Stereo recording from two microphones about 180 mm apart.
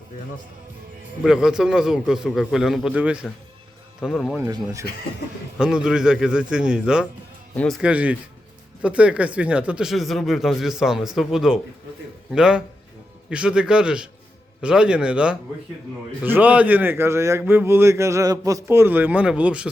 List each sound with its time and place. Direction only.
1.2 s speech: centre (ahead or behind)
4.5 s speech: 15° right (ahead or behind)
5.5 s speech: 5° right (ahead or behind)
7.5 s speech: 5° left (ahead or behind)
7.8 s speech: 5° right (ahead or behind)